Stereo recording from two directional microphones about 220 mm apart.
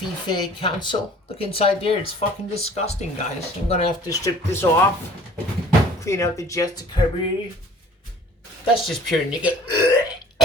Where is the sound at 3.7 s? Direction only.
25° left (ahead or behind).